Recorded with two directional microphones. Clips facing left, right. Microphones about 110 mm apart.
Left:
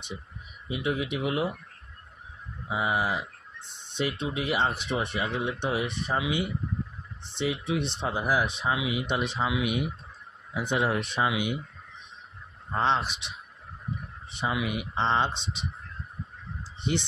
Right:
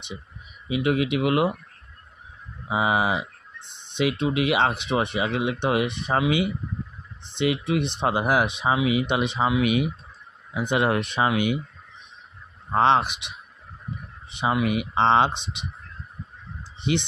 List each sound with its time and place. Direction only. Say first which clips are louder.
0.7 s speech: right 7 dB; 70° right (ahead or behind)
2.7 s speech: right 5 dB; 80° right
4.0 s speech: right 7 dB; 70° right (ahead or behind)
7.3 s speech: right 5 dB; 65° right (ahead or behind)
9.6 s speech: right 6 dB; 90° right
10.7 s speech: right 4 dB; 70° right (ahead or behind)
12.7 s speech: right 7 dB; 65° right (ahead or behind)
14.4 s speech: right 6 dB; 65° right (ahead or behind)